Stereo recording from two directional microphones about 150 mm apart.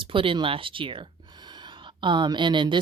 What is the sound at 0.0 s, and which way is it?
Speech, 35° right (ahead or behind).